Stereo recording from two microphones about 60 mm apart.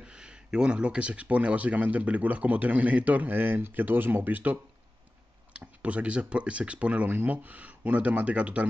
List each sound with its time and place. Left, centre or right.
0.0 s speech: centre
5.8 s speech: right